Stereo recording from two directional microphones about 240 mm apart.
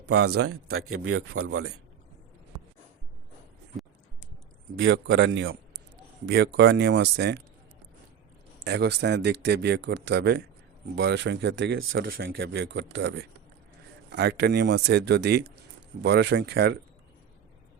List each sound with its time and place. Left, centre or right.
0.0 s speech: right
4.8 s speech: right
8.6 s speech: right
12.0 s speech: right